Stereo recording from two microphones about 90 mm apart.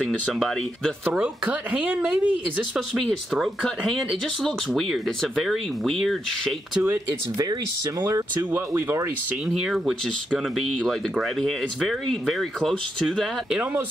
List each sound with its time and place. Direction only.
0.0 s speech: centre (ahead or behind)
1.1 s speech: 15° right (ahead or behind)
3.3 s speech: 5° left (ahead or behind)
8.0 s speech: 40° right (ahead or behind)
8.5 s speech: 25° right (ahead or behind)
9.6 s speech: 5° right (ahead or behind)
10.3 s speech: 10° left (ahead or behind)